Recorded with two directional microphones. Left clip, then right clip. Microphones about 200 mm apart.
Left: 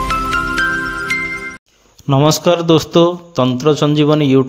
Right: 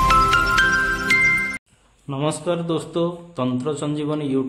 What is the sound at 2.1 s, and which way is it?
A man's voice, 40° left (ahead or behind).